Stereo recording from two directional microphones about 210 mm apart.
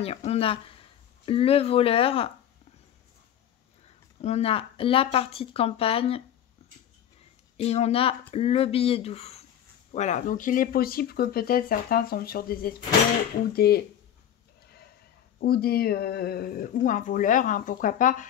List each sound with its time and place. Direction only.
0.0 s speech: 30° left (ahead or behind)
3.8 s speech: 30° left (ahead or behind)
7.5 s speech: 30° left (ahead or behind); by 13.8 s 50° left (ahead or behind)
15.3 s speech: 45° left (ahead or behind)